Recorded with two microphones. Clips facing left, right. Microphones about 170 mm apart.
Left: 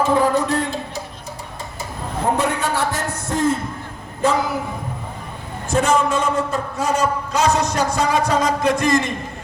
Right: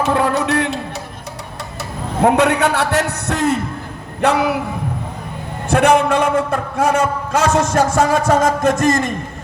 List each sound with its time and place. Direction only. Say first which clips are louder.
0.0 s music: even; 70° right (ahead or behind)
1.8 s a man's voice: right 8 dB; 70° right (ahead or behind)
5.6 s a man's voice: right 5 dB; 65° right (ahead or behind); by 9.1 s 45° right (ahead or behind)